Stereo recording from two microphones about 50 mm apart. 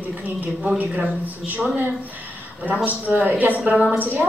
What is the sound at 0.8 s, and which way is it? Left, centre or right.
Speech, right.